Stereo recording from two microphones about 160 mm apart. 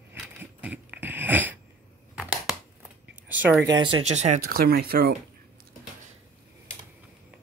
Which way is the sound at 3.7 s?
30° right (ahead or behind).